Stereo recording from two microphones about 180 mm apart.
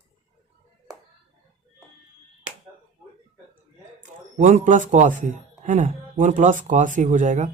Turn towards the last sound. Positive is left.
turn(degrees=-40)  # may be behind; listen again after turning